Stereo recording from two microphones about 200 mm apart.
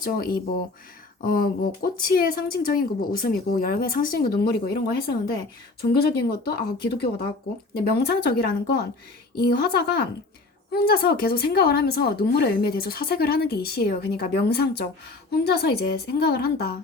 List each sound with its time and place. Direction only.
0.0 s a woman's voice: 50° left (ahead or behind)
5.9 s a woman's voice: 50° left (ahead or behind)